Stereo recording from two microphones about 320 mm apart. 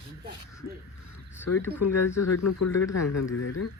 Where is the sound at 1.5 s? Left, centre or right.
Left.